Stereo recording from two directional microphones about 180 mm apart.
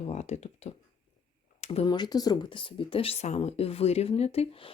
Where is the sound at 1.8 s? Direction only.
25° left (ahead or behind).